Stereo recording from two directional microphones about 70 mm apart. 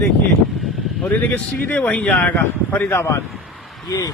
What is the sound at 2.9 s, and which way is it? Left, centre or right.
Speech, left.